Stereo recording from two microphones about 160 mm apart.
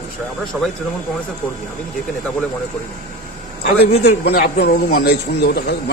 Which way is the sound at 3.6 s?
90° left.